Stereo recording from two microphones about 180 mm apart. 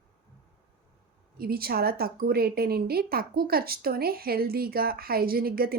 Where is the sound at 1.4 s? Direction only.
55° right (ahead or behind).